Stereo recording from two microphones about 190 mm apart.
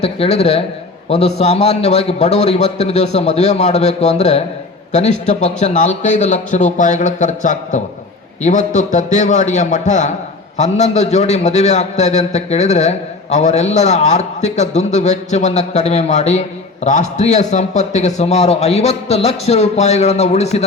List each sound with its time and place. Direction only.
0.0 s a man's voice: 35° left (ahead or behind)